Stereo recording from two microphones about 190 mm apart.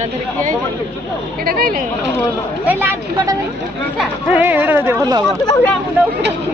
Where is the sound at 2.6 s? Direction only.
10° right (ahead or behind).